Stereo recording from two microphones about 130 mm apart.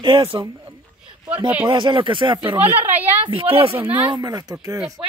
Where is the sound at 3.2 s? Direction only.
45° right (ahead or behind).